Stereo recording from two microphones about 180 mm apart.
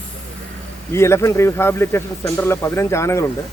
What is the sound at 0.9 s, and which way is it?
Speech, 15° left (ahead or behind).